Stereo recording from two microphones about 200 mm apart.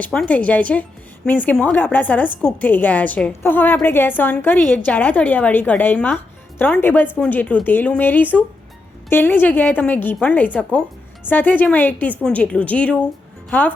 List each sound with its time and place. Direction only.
0.0 s speech: 5° left (ahead or behind)